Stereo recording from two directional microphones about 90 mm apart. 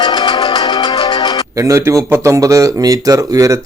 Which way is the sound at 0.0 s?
50° left (ahead or behind).